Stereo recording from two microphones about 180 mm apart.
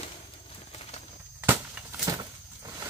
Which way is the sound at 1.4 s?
10° right (ahead or behind).